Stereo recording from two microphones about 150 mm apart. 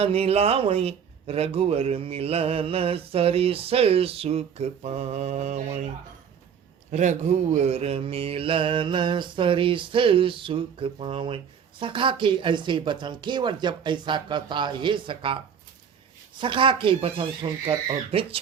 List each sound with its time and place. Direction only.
0.0 s a man's voice: 40° right (ahead or behind)
6.9 s a man's voice: 50° right (ahead or behind); by 15.4 s 35° right (ahead or behind)
16.4 s a man's voice: 35° right (ahead or behind)